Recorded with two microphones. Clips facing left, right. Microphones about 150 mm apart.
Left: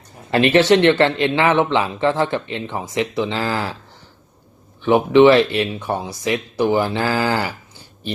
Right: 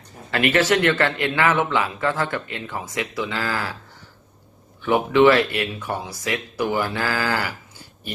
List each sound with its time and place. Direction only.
0.3 s speech: 25° left (ahead or behind)
4.8 s speech: 25° left (ahead or behind)